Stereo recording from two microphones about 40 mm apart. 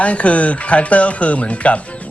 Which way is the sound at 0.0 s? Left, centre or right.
Left.